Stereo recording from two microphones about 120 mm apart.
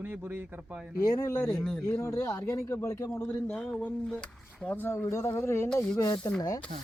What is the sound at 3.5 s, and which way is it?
Speech, 10° left (ahead or behind).